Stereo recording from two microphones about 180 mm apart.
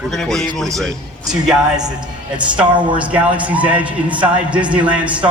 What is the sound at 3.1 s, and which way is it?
Speech, 10° right (ahead or behind).